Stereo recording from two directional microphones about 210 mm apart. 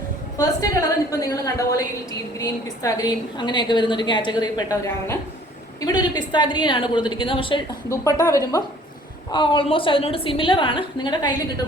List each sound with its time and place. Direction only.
0.3 s a woman's voice: 15° left (ahead or behind)